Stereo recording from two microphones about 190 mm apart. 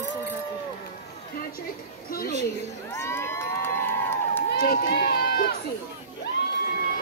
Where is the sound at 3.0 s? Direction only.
15° left (ahead or behind).